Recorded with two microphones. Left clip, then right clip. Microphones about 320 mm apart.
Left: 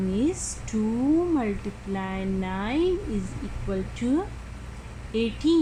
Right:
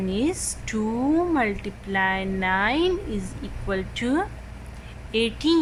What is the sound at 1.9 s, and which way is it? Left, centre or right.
A woman's voice, right.